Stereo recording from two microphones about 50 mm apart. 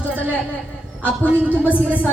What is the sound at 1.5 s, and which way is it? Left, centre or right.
Speech, right.